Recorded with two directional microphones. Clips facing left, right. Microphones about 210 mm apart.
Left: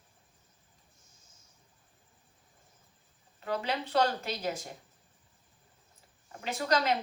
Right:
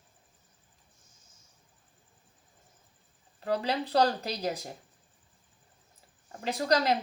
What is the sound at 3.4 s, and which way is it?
A woman's voice, 35° right (ahead or behind).